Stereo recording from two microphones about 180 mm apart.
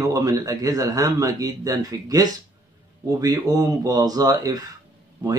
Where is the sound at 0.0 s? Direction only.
20° right (ahead or behind).